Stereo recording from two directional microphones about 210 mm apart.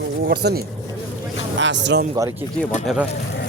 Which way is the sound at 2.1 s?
15° right (ahead or behind).